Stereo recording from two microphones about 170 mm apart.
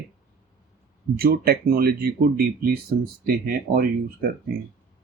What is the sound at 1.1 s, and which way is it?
Speech, 65° right (ahead or behind).